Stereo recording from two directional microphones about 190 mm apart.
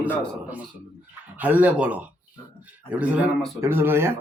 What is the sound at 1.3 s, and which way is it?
Speech, 10° right (ahead or behind).